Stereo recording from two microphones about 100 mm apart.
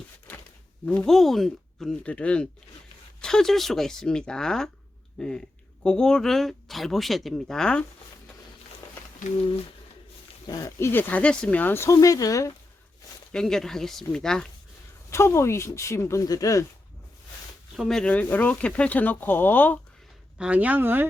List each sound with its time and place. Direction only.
0.9 s speech: 5° left (ahead or behind)
10.4 s speech: 40° left (ahead or behind)
10.8 s speech: 25° left (ahead or behind)
11.1 s speech: 15° left (ahead or behind); by 12.5 s 35° left (ahead or behind)
13.3 s speech: 5° left (ahead or behind)
15.1 s speech: 25° left (ahead or behind)
17.7 s speech: 5° left (ahead or behind)
20.4 s speech: 15° right (ahead or behind)